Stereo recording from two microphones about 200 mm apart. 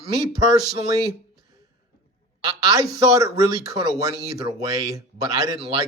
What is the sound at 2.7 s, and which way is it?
Speech, 15° right (ahead or behind).